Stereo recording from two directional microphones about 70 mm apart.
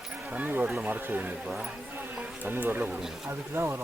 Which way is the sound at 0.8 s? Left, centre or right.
Right.